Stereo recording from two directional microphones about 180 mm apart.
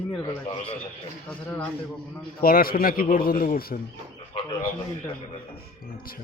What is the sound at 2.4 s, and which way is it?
Speech, 55° left (ahead or behind).